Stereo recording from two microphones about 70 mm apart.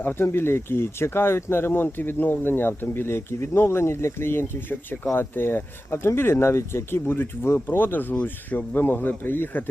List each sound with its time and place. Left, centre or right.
0.0 s speech: left